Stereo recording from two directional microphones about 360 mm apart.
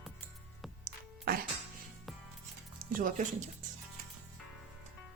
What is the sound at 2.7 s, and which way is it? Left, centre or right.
Speech, right.